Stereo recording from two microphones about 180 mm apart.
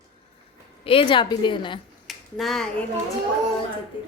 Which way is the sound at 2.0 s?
Centre (ahead or behind).